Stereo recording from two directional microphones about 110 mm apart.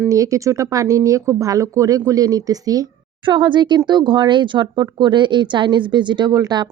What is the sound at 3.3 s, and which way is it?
Speech, 45° right (ahead or behind).